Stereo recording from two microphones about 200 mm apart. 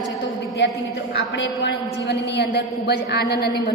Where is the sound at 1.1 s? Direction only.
60° left (ahead or behind).